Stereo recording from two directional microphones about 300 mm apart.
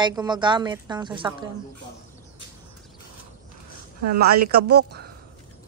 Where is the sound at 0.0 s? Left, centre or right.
Centre.